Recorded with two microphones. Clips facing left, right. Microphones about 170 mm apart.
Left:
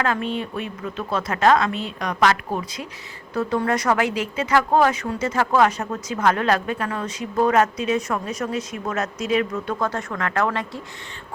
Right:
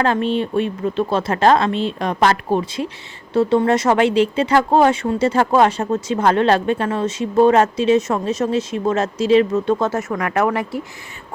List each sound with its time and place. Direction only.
0.0 s speech: 30° right (ahead or behind)